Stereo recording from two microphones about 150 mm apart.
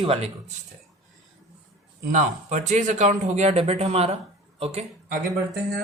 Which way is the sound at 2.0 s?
55° right (ahead or behind).